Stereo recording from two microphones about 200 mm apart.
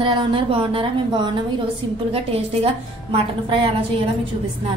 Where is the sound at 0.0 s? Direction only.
25° right (ahead or behind).